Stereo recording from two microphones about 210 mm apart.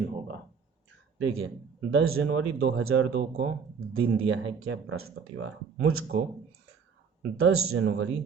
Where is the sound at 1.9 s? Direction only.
75° right (ahead or behind).